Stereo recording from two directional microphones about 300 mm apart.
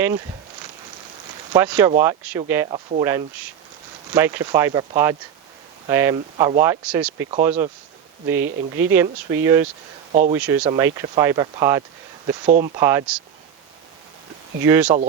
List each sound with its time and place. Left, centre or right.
1.5 s speech: centre
10.1 s speech: right
10.4 s speech: centre
12.5 s speech: right
14.6 s speech: centre